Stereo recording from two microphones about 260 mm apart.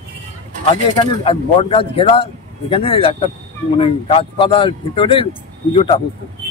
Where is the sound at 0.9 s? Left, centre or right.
Centre.